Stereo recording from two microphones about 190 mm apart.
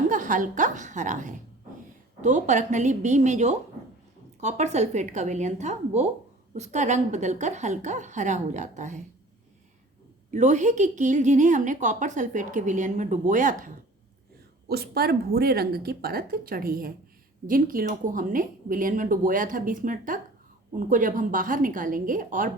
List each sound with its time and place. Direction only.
0.1 s a woman's voice: 45° right (ahead or behind)
10.3 s a woman's voice: 40° right (ahead or behind)
14.7 s a woman's voice: 55° right (ahead or behind)